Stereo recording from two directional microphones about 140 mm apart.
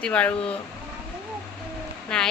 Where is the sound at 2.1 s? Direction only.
5° left (ahead or behind).